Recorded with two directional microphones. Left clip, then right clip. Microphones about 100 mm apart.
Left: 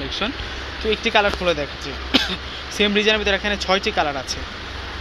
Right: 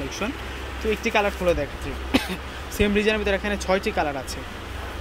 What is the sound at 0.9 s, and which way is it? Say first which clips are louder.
Speech: left 4 dB; 20° right (ahead or behind).